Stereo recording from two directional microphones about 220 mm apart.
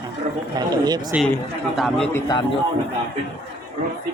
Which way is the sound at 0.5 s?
20° right (ahead or behind).